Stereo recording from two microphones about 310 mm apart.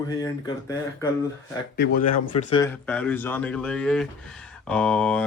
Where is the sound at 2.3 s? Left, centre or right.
Centre.